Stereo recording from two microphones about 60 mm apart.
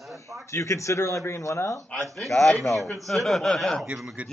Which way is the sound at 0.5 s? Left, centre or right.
Left.